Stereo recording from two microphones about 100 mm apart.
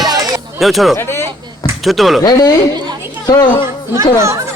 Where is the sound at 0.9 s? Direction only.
25° left (ahead or behind).